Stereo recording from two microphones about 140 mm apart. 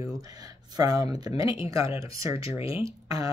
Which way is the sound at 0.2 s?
25° right (ahead or behind).